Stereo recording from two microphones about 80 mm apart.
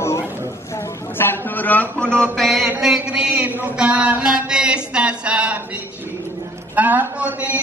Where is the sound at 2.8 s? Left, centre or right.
Centre.